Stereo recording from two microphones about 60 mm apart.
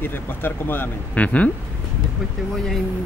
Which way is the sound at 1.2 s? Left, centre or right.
Left.